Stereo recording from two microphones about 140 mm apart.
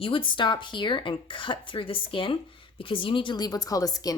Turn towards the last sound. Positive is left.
turn(degrees=25)  # may be behind; listen again after turning